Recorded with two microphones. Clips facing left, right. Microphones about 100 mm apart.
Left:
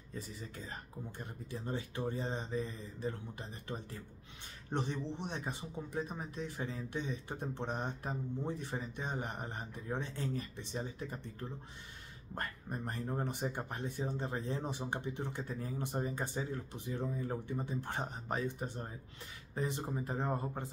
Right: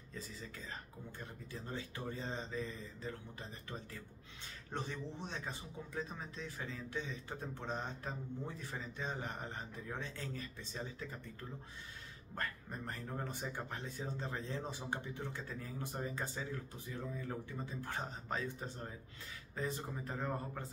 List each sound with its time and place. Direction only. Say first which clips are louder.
1.7 s speech: left 6 dB; 20° left (ahead or behind)
12.4 s speech: left 2 dB; 20° left (ahead or behind)